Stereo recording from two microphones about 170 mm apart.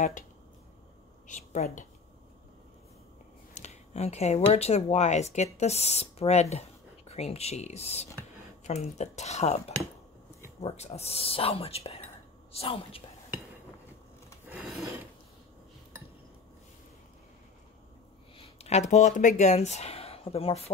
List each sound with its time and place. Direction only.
1.2 s a woman's voice: 45° left (ahead or behind)
3.5 s speech: 40° left (ahead or behind)
10.6 s speech: 40° left (ahead or behind)
18.6 s speech: 40° left (ahead or behind)